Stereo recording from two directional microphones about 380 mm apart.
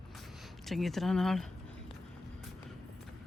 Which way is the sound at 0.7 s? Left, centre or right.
Centre.